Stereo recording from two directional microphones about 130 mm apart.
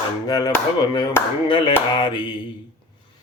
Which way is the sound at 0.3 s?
30° left (ahead or behind).